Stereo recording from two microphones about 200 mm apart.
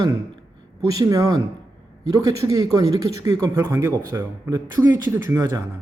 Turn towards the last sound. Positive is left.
turn(degrees=-15)  # may be behind; listen again after turning